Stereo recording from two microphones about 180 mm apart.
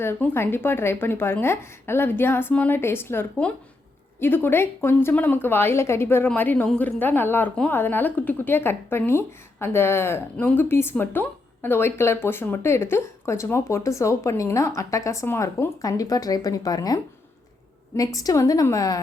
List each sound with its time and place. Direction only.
0.0 s a woman's voice: 15° left (ahead or behind)